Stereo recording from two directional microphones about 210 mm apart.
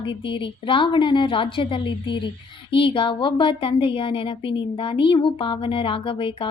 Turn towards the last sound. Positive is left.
turn(degrees=25)  # may be behind; listen again after turning